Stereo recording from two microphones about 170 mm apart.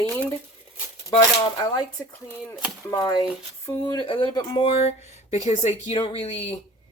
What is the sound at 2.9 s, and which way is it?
Speech, 25° left (ahead or behind).